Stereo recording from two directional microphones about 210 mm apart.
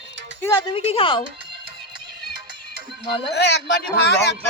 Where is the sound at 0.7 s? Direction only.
25° left (ahead or behind).